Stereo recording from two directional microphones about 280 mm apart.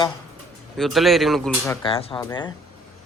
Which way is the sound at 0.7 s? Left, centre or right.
Centre.